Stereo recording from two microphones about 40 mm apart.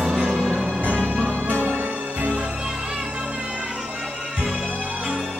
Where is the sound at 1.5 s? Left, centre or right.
Right.